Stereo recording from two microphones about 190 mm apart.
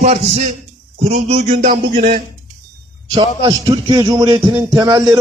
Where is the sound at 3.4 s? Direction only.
25° right (ahead or behind).